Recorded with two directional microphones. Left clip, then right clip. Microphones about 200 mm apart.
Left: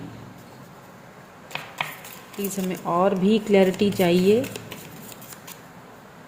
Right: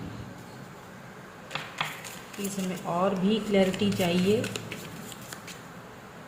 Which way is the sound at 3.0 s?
40° left (ahead or behind).